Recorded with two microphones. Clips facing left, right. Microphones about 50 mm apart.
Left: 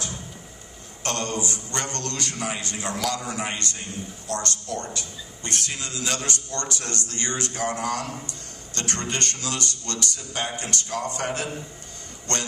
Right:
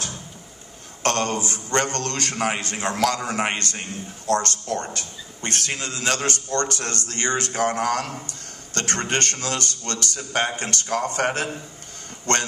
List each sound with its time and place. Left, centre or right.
1.0 s a man's voice: right